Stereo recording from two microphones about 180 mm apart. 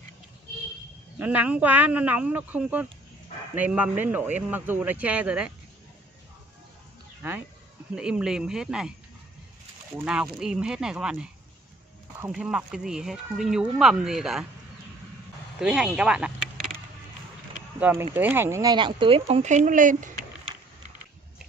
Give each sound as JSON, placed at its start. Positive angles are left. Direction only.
{"t": 1.1, "sound": "speech", "side_deg": -10}
{"t": 7.9, "sound": "speech", "side_deg": -5}
{"t": 9.9, "sound": "speech", "side_deg": -5}
{"t": 12.3, "sound": "speech", "side_deg": -5}
{"t": 15.6, "sound": "speech", "side_deg": -5}
{"t": 17.7, "sound": "speech", "side_deg": -10}